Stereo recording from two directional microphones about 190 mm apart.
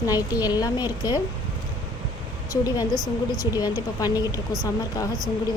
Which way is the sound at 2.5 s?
20° left (ahead or behind).